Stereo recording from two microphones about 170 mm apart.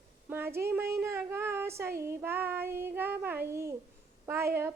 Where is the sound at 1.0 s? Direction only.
15° right (ahead or behind).